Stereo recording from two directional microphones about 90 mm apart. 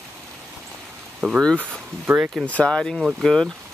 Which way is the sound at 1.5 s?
20° right (ahead or behind).